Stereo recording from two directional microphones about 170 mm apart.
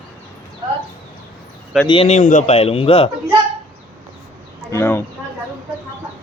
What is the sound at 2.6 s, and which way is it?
Speech, 35° left (ahead or behind).